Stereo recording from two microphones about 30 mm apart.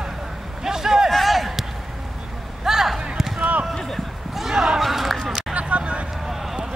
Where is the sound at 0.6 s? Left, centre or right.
Centre.